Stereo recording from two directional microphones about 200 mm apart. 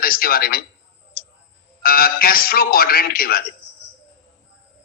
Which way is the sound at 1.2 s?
45° left (ahead or behind).